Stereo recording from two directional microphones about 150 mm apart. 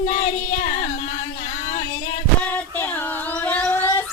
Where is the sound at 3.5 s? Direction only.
10° left (ahead or behind).